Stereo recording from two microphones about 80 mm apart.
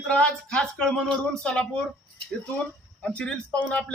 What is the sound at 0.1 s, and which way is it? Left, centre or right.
Speech, centre.